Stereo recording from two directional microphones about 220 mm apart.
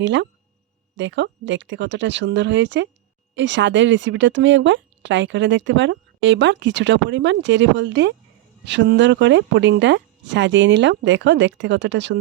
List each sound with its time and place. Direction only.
0.0 s speech: 55° right (ahead or behind)